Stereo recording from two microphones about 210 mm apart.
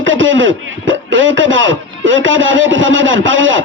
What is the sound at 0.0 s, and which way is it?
A man's voice, 65° right (ahead or behind).